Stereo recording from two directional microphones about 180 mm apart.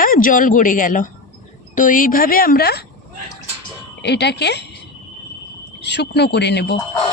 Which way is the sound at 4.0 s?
70° left (ahead or behind).